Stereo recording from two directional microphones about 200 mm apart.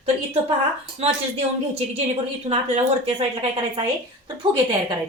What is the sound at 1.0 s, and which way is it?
Speech, 30° right (ahead or behind).